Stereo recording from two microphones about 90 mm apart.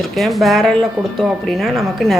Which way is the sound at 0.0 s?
Centre (ahead or behind).